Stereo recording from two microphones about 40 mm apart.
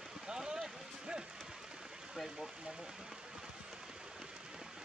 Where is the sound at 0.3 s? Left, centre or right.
Centre.